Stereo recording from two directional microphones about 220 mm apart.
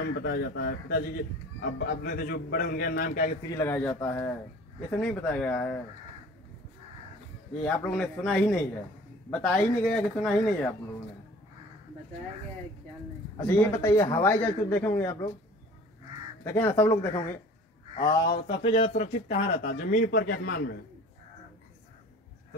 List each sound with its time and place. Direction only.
0.0 s speech: 50° left (ahead or behind)
3.4 s a man's voice: 10° left (ahead or behind)
7.6 s speech: 5° left (ahead or behind)
13.5 s a man's voice: 10° left (ahead or behind)
16.4 s a man's voice: 10° left (ahead or behind)
18.1 s speech: 20° left (ahead or behind); by 20.7 s 45° left (ahead or behind)